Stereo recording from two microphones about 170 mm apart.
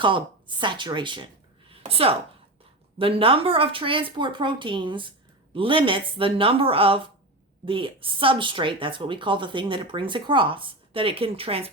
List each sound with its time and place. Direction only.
0.0 s a woman's voice: 30° right (ahead or behind)